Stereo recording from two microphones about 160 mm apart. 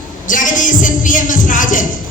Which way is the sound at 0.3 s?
55° left (ahead or behind).